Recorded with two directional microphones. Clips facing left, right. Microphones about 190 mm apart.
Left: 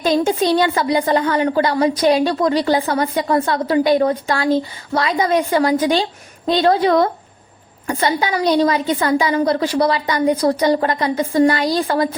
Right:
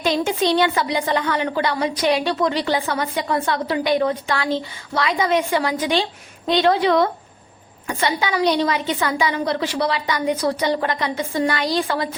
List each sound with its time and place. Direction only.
0.0 s a woman's voice: 40° left (ahead or behind)